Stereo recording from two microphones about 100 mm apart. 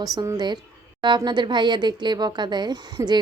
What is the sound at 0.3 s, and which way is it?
A woman's voice, 45° right (ahead or behind).